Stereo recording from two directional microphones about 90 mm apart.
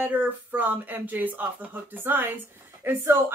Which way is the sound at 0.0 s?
20° right (ahead or behind).